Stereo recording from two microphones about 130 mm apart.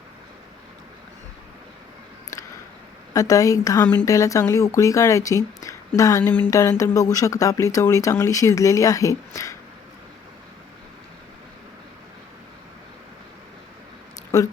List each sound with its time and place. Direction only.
3.1 s speech: 25° left (ahead or behind)
14.3 s speech: 25° left (ahead or behind)